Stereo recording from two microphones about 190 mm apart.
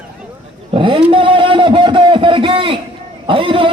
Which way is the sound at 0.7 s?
25° right (ahead or behind).